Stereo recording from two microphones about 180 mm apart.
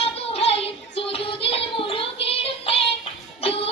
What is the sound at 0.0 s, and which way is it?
Music, 35° left (ahead or behind).